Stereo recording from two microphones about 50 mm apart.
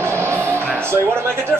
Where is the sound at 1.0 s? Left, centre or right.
Right.